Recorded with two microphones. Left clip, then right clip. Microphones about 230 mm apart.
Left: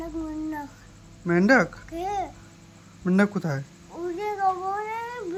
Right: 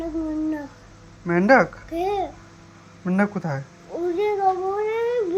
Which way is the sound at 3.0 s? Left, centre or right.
Left.